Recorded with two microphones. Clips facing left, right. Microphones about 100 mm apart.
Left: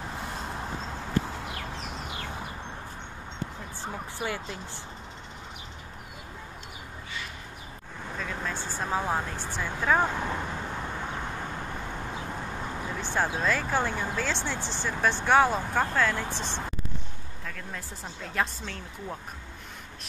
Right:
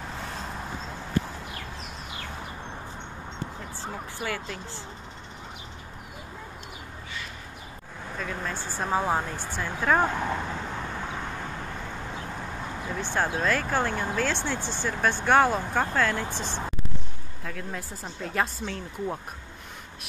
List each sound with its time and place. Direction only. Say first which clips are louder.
4.2 s speech: even; 20° left (ahead or behind)
8.2 s a sound: right 1 dB; centre (ahead or behind)
8.7 s speech: right 3 dB; 5° right (ahead or behind)
13.0 s speech: right 1 dB; centre (ahead or behind)